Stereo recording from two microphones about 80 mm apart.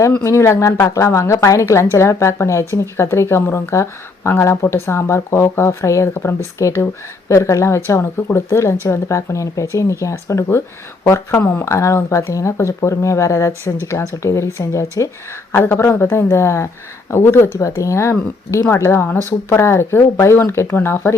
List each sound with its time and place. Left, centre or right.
0.3 s a woman's voice: left
11.6 s a woman's voice: left
15.5 s a woman's voice: left